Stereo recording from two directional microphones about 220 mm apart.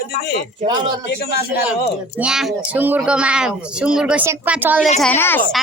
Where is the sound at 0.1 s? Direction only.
45° left (ahead or behind).